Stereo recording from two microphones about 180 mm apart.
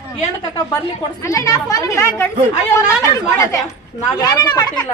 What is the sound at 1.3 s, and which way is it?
Speech, 20° left (ahead or behind).